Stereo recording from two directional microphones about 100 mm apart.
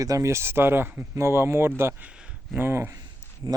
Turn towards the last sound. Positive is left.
turn(degrees=-45)  # may be behind; listen again after turning